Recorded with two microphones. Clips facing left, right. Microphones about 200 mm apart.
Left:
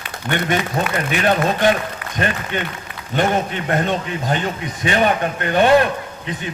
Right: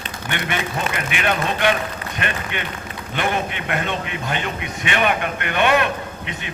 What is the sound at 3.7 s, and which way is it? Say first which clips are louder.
A man's voice: left 6 dB; 40° left (ahead or behind).